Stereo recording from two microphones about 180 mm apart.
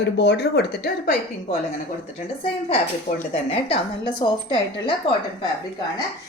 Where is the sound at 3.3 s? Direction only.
30° left (ahead or behind).